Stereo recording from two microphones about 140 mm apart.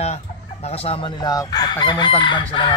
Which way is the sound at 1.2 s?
30° left (ahead or behind).